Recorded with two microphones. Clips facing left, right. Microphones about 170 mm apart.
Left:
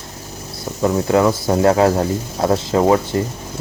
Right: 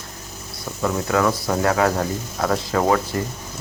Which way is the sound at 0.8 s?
25° left (ahead or behind).